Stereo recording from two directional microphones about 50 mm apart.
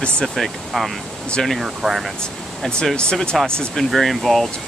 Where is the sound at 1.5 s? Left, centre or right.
Centre.